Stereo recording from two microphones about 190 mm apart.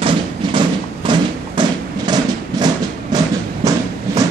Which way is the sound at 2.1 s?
20° right (ahead or behind).